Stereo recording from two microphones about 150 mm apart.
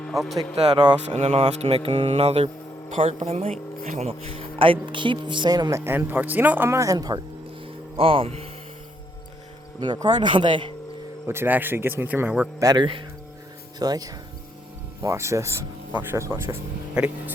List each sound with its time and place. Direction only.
0.0 s speech: centre (ahead or behind)
1.1 s speech: 50° right (ahead or behind); by 5.8 s 25° right (ahead or behind)
5.8 s speech: 15° right (ahead or behind)
7.9 s speech: 40° right (ahead or behind)
9.8 s speech: 30° right (ahead or behind)
11.3 s speech: 15° right (ahead or behind)
12.5 s speech: 25° right (ahead or behind)
16.9 s speech: 5° right (ahead or behind)